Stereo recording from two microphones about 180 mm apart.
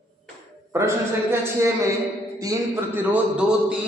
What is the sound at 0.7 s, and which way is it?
A man's voice, 15° right (ahead or behind).